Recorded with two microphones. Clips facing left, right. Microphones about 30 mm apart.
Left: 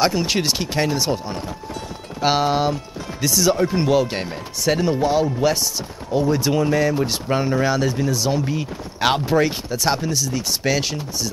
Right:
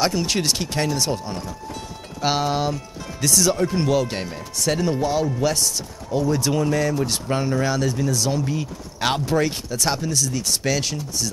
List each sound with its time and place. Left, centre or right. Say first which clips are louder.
0.0 s speech: left 2 dB; centre